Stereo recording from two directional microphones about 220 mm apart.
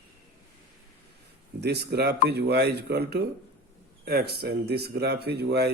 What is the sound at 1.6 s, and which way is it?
A man's voice, 50° right (ahead or behind).